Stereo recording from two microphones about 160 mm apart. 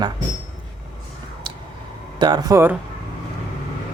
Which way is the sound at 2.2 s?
25° right (ahead or behind).